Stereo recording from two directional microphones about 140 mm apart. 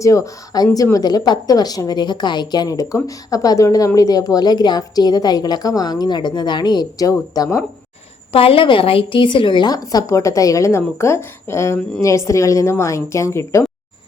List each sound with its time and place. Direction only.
0.0 s a woman's voice: 25° left (ahead or behind)
8.3 s a woman's voice: 40° left (ahead or behind); by 13.7 s 20° left (ahead or behind)